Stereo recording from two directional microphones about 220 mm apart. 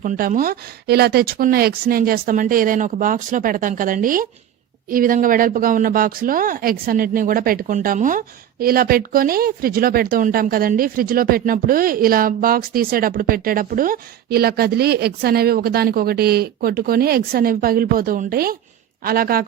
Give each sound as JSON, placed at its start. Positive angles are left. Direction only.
{"t": 0.0, "sound": "speech", "side_deg": -40}